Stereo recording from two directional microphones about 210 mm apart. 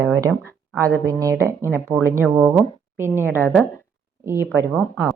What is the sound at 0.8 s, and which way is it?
Speech, 15° right (ahead or behind).